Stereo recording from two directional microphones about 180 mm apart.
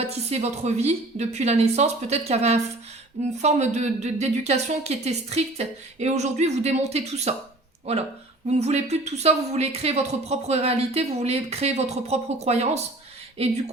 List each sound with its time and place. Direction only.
0.0 s speech: 35° right (ahead or behind)